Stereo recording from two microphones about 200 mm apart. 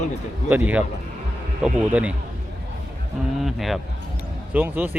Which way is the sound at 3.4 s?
Centre (ahead or behind).